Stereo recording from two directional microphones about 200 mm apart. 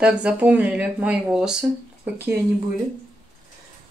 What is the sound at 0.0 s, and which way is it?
A woman's voice, 5° right (ahead or behind).